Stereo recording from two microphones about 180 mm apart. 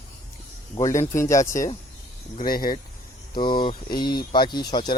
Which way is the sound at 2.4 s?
55° left (ahead or behind).